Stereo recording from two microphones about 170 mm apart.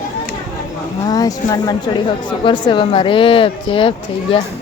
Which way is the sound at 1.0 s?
20° left (ahead or behind).